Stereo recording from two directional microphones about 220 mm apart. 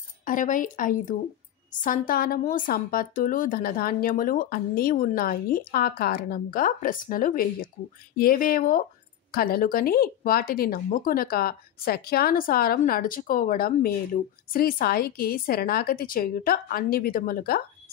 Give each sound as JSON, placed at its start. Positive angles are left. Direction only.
{"t": 0.2, "sound": "speech", "side_deg": 35}